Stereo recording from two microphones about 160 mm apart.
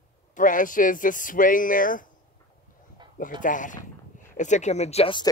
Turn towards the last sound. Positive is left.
turn(degrees=35)  # may be behind; listen again after turning